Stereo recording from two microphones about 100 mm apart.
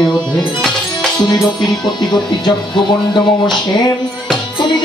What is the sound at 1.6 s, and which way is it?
Music, 45° left (ahead or behind).